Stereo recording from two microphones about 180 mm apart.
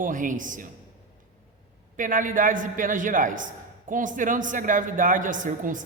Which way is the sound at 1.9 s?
45° right (ahead or behind).